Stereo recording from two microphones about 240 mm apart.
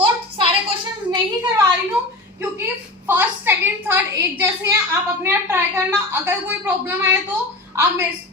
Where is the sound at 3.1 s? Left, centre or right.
Centre.